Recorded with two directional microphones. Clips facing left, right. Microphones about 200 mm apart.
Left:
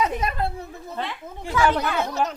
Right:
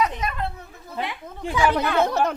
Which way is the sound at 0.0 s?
35° left (ahead or behind).